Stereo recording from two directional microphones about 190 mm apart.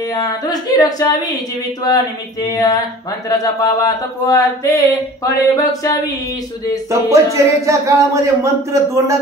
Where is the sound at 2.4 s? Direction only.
20° left (ahead or behind).